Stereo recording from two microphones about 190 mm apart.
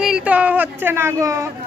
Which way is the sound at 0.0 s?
5° right (ahead or behind).